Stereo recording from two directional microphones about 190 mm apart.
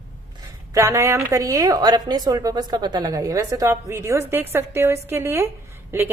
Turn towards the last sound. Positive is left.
turn(degrees=-10)  # may be behind; listen again after turning